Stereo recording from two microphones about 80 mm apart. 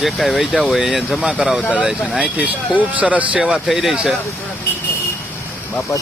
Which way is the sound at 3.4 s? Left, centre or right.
Centre.